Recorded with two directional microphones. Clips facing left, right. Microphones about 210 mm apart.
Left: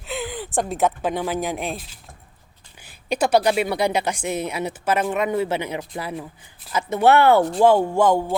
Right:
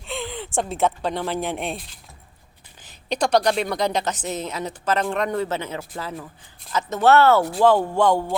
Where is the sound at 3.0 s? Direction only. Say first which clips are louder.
Left 1 dB; 10° left (ahead or behind).